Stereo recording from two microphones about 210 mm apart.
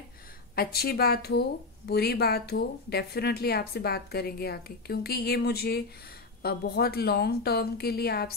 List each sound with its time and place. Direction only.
0.6 s speech: 45° left (ahead or behind)